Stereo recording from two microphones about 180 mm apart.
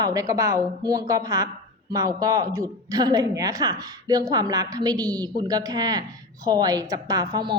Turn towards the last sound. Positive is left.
turn(degrees=-25)  # may be behind; listen again after turning